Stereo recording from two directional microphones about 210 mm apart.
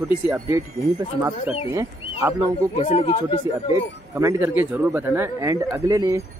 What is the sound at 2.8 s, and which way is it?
Speech, 30° left (ahead or behind).